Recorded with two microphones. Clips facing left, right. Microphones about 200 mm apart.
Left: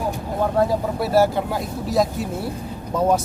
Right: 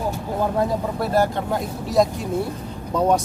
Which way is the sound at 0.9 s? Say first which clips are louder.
Left 4 dB; 5° left (ahead or behind).